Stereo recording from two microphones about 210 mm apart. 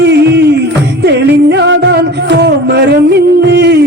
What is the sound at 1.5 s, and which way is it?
Music, 55° right (ahead or behind).